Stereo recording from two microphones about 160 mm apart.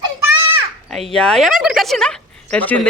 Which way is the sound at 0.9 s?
5° left (ahead or behind).